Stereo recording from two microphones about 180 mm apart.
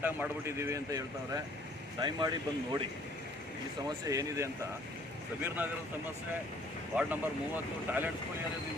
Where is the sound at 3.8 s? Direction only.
20° right (ahead or behind).